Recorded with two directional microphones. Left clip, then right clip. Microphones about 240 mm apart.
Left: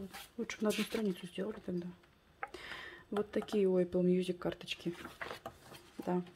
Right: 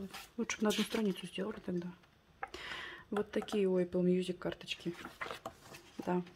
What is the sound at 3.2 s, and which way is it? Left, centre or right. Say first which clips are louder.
Speech: left 1 dB; centre.